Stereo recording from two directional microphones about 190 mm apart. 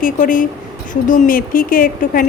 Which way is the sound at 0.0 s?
45° left (ahead or behind).